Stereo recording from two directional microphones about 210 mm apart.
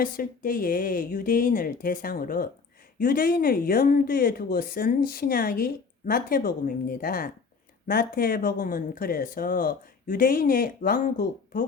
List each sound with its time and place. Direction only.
0.0 s speech: 40° left (ahead or behind)